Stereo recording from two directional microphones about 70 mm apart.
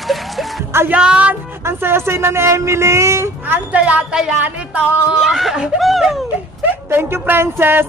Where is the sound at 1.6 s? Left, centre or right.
Right.